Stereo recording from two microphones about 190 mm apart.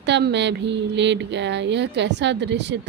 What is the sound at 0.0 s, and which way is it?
Speech, 65° right (ahead or behind).